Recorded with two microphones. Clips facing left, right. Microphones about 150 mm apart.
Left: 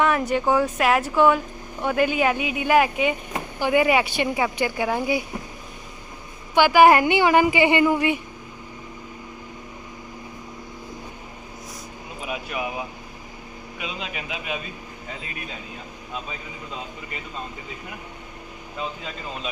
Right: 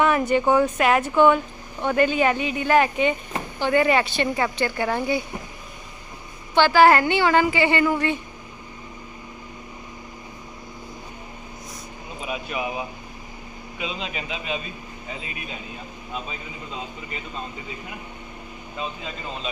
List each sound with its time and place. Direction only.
0.0 s speech: centre (ahead or behind)
6.5 s speech: 10° left (ahead or behind)
12.2 s speech: 5° left (ahead or behind)